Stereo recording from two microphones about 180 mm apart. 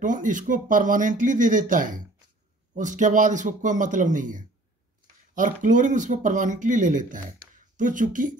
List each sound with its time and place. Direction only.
0.0 s speech: 45° right (ahead or behind)